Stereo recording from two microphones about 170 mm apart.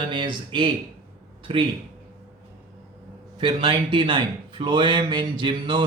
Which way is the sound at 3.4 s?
30° right (ahead or behind).